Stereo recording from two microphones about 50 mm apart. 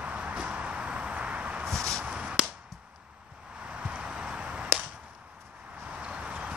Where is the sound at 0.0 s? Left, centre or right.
Right.